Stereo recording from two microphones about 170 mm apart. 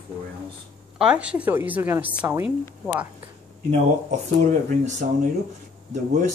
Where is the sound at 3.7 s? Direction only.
45° right (ahead or behind).